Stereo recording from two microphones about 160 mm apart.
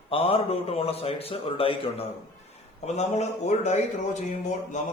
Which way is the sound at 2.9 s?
45° left (ahead or behind).